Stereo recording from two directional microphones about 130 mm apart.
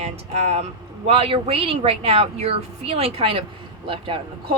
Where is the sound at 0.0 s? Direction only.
55° right (ahead or behind).